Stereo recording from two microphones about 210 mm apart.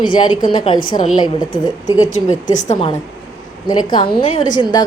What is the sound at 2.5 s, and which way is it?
Speech, 35° left (ahead or behind).